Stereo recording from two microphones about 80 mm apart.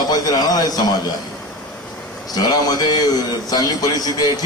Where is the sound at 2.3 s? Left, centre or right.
Left.